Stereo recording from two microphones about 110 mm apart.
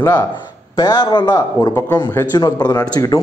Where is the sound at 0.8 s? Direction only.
40° left (ahead or behind).